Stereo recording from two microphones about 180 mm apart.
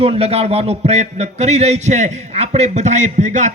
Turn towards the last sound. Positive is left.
turn(degrees=-40)  # may be behind; listen again after turning